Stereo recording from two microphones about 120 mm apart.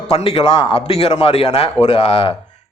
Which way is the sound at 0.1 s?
60° left (ahead or behind).